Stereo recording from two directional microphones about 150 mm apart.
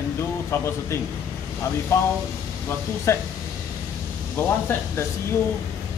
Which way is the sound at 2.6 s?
15° left (ahead or behind).